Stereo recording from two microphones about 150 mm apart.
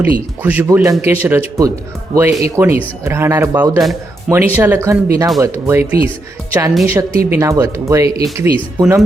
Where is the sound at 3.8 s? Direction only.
Centre (ahead or behind).